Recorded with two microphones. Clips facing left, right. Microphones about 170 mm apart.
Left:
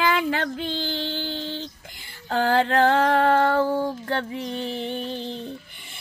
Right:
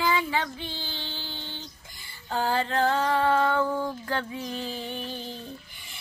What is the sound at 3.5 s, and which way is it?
Music, 30° left (ahead or behind).